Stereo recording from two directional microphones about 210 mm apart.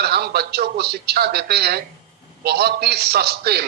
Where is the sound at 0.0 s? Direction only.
50° right (ahead or behind).